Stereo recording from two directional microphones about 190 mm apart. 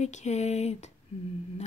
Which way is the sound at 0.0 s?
35° left (ahead or behind).